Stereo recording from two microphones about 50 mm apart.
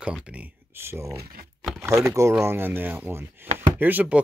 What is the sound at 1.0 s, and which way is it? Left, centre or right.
Speech, right.